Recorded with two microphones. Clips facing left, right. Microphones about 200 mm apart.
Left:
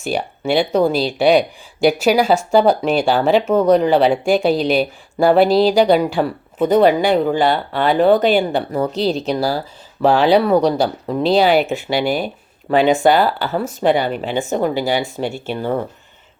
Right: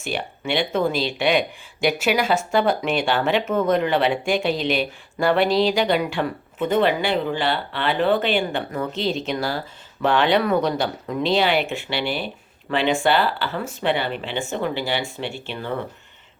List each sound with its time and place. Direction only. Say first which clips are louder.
0.0 s speech: left 6 dB; 40° left (ahead or behind)